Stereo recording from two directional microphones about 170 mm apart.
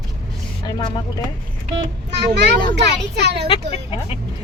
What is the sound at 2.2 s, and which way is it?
A child's voice, 80° right.